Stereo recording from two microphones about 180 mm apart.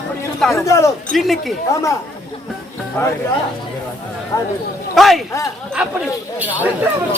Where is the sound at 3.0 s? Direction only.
15° left (ahead or behind).